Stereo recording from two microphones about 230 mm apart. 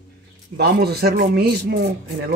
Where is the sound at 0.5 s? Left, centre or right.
Right.